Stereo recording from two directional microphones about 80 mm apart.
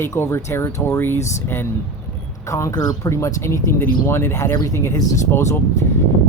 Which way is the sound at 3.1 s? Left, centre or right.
Left.